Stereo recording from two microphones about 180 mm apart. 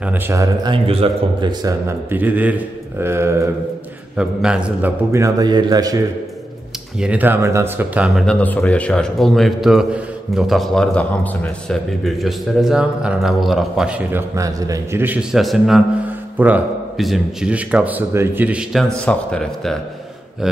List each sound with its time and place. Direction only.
0.0 s speech: 15° right (ahead or behind)
0.8 s speech: 30° right (ahead or behind); by 4.9 s 5° right (ahead or behind)
5.1 s a man's voice: 20° right (ahead or behind)
7.0 s speech: 10° right (ahead or behind)